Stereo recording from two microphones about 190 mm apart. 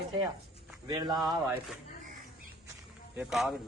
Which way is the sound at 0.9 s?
20° right (ahead or behind).